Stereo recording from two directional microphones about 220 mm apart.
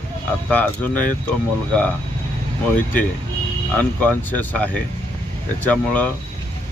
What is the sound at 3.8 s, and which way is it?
Speech, 5° left (ahead or behind).